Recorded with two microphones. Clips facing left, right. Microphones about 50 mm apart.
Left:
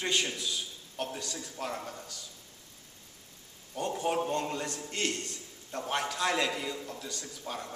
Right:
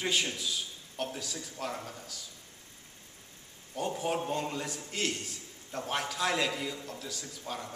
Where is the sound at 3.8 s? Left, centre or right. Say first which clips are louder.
Left 2 dB; centre.